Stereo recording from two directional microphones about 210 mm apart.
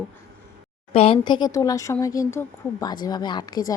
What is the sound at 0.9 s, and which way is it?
A woman's voice, 25° left (ahead or behind).